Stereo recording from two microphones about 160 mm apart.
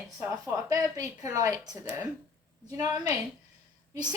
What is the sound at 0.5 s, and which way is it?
A woman's voice, 20° right (ahead or behind).